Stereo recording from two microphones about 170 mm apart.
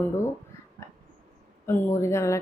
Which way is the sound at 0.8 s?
15° left (ahead or behind).